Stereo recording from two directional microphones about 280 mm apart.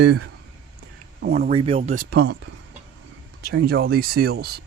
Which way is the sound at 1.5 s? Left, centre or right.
Centre.